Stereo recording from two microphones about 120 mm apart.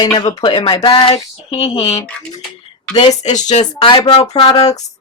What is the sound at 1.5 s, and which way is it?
Speech, 60° left (ahead or behind).